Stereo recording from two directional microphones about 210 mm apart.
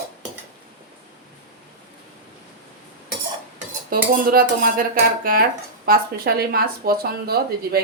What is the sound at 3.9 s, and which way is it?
Speech, 45° right (ahead or behind).